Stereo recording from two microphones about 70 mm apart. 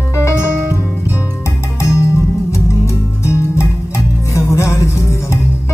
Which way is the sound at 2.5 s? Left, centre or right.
Left.